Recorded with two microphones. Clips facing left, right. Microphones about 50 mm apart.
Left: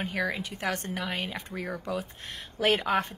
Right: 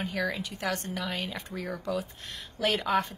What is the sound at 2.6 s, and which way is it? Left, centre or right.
Speech, left.